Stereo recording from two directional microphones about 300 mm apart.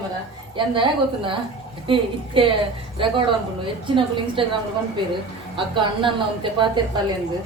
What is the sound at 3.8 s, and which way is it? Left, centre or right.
Speech, centre.